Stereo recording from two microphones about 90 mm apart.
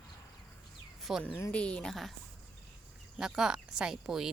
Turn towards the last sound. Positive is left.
turn(degrees=-5)  # may be behind; listen again after turning